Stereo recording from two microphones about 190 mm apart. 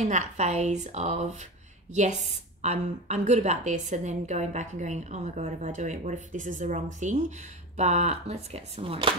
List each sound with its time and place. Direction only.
0.0 s a woman's voice: 35° right (ahead or behind)